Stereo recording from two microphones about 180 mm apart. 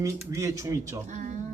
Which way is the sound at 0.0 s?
15° right (ahead or behind).